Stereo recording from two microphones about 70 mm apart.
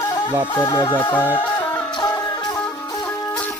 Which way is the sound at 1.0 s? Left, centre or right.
Left.